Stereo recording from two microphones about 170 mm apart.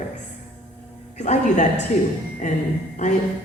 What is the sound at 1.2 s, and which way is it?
Speech, 45° left (ahead or behind).